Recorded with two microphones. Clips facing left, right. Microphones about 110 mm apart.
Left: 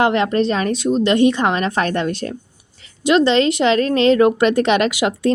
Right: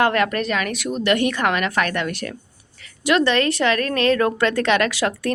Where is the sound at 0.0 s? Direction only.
25° left (ahead or behind).